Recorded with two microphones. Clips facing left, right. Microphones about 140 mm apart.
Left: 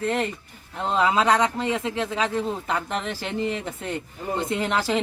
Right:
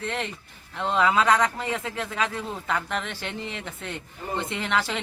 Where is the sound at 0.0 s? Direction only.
40° left (ahead or behind).